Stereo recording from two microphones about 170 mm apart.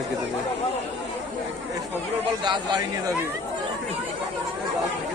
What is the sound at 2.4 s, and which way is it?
Speech, 25° right (ahead or behind).